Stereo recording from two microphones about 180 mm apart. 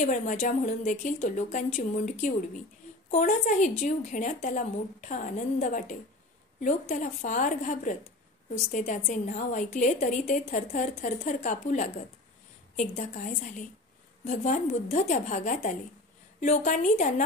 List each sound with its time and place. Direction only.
0.0 s a woman's voice: 40° left (ahead or behind)
3.1 s a woman's voice: 45° left (ahead or behind)